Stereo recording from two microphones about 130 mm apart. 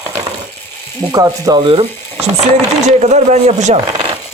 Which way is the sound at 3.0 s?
60° right (ahead or behind).